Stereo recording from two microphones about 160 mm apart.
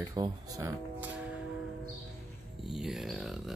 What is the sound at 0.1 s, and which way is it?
Speech, 20° right (ahead or behind).